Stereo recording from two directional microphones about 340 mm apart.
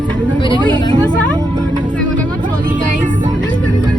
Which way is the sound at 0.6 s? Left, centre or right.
Centre.